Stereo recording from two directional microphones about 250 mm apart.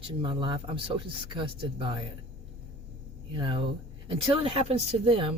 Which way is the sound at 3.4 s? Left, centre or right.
Centre.